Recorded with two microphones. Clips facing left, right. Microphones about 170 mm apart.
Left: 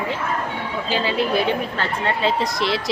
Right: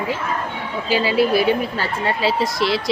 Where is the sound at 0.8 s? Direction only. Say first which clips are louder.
Right 5 dB; 10° right (ahead or behind).